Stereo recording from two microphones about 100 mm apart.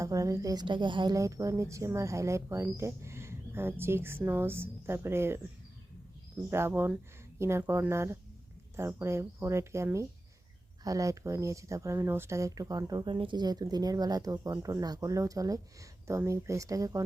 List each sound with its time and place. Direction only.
0.0 s a woman's voice: 35° right (ahead or behind); by 1.1 s 50° right (ahead or behind)
1.1 s speech: 35° right (ahead or behind)
6.5 s speech: 25° right (ahead or behind)
13.1 s speech: 55° right (ahead or behind); by 17.0 s 35° right (ahead or behind)